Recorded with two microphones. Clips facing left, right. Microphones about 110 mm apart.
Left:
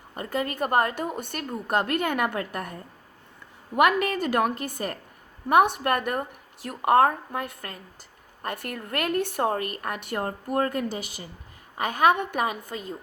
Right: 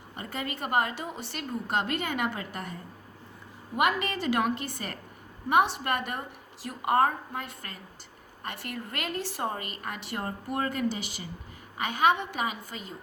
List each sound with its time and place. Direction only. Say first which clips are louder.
0.2 s a woman's voice: left 7 dB; 45° left (ahead or behind)
3.8 s a woman's voice: left 6 dB; 60° left (ahead or behind)